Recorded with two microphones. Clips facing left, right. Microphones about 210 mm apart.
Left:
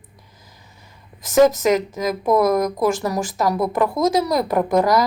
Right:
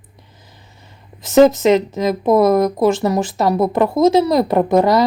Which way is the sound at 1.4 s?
25° right (ahead or behind).